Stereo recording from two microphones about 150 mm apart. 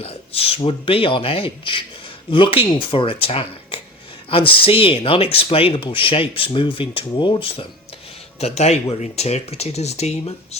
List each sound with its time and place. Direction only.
0.0 s speech: 40° left (ahead or behind)